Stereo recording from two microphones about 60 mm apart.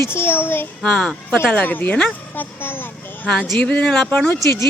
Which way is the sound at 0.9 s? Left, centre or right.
Centre.